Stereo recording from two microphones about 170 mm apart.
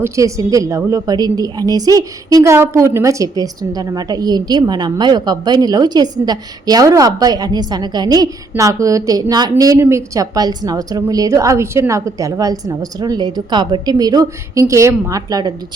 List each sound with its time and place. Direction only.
0.0 s a woman's voice: 20° right (ahead or behind)